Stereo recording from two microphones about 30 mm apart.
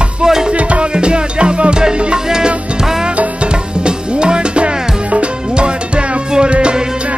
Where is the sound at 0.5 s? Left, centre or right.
Right.